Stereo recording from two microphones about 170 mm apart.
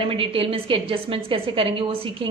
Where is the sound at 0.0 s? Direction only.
30° right (ahead or behind).